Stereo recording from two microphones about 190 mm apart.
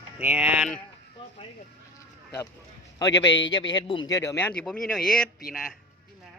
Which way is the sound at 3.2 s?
75° left (ahead or behind).